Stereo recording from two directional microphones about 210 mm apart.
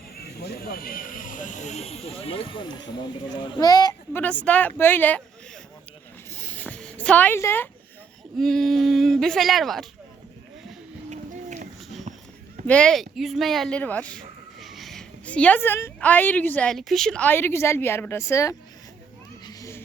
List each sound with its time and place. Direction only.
0.2 s speech: 50° left (ahead or behind); by 5.2 s 10° left (ahead or behind)
6.3 s a sound: 10° left (ahead or behind)
8.4 s speech: centre (ahead or behind)
11.1 s a sound: 35° right (ahead or behind)
12.6 s speech: 5° left (ahead or behind)
19.5 s children playing: 15° left (ahead or behind)